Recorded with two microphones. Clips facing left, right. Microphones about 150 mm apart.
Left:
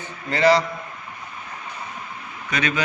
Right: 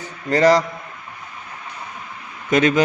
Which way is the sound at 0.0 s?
40° right (ahead or behind).